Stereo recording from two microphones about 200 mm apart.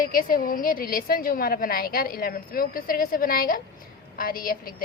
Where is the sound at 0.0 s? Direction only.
45° left (ahead or behind).